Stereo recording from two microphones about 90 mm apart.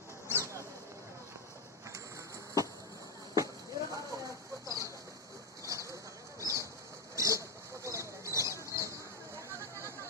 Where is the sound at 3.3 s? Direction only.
40° right (ahead or behind).